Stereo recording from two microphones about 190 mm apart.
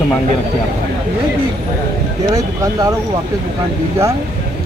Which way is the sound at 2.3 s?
20° right (ahead or behind).